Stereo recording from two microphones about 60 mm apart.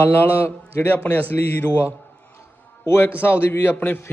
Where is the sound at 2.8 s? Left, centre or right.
Left.